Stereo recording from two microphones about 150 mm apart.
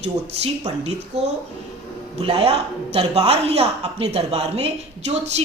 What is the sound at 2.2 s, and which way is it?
A woman's voice, 40° right (ahead or behind).